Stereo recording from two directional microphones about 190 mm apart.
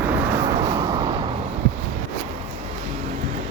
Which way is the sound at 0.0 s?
10° right (ahead or behind).